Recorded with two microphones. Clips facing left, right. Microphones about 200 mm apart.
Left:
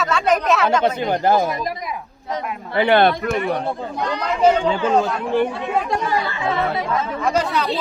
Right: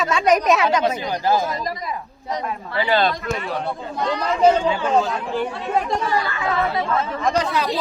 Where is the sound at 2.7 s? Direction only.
60° left (ahead or behind).